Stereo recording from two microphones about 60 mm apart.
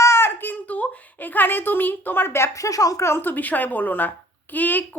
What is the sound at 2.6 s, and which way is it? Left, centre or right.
Speech, left.